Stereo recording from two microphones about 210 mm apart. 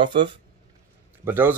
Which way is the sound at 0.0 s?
20° right (ahead or behind).